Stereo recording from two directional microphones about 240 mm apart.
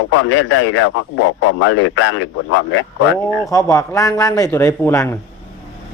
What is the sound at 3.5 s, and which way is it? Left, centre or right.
Speech, centre.